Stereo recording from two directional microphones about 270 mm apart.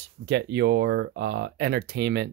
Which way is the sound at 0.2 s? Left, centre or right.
Right.